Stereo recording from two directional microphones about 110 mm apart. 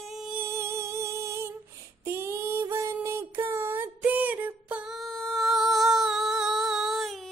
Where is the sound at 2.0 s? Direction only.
25° right (ahead or behind).